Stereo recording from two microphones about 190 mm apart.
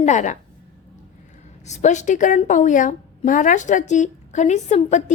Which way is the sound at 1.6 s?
40° left (ahead or behind).